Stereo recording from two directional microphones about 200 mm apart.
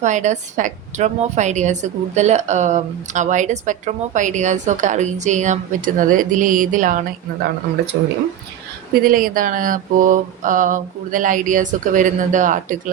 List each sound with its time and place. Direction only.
0.0 s a woman's voice: 35° right (ahead or behind)
9.0 s a woman's voice: 45° right (ahead or behind)